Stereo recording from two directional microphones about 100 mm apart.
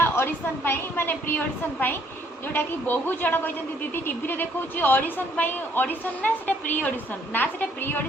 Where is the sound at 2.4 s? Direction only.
20° left (ahead or behind).